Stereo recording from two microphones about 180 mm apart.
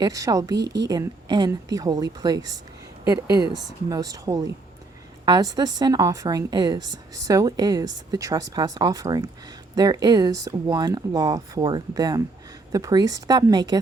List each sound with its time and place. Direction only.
0.0 s a woman's voice: 20° right (ahead or behind)
0.6 s speech: 70° right (ahead or behind)
0.9 s a woman's voice: 20° right (ahead or behind)